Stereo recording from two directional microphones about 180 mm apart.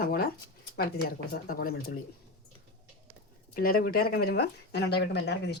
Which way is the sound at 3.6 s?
55° left (ahead or behind).